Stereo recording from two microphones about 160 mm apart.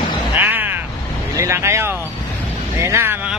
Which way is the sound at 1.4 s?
15° right (ahead or behind).